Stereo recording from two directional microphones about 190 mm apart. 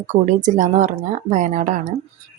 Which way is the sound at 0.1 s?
40° right (ahead or behind).